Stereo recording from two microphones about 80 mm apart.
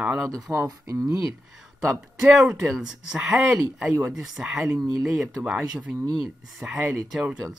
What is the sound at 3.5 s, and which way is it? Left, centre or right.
Speech, centre.